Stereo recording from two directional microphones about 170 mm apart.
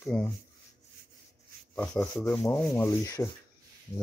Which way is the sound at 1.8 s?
5° left (ahead or behind).